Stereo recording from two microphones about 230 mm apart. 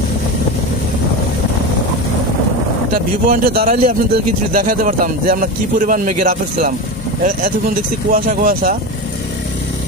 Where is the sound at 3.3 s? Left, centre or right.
Right.